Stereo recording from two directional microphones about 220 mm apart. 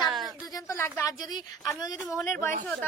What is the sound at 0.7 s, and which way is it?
A woman's voice, 10° left (ahead or behind).